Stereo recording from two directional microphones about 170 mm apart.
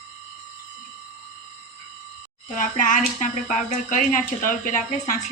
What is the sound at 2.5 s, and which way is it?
A woman's voice, 50° left (ahead or behind).